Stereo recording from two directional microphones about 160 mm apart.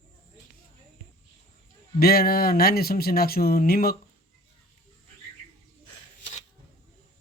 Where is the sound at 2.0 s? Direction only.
70° left (ahead or behind).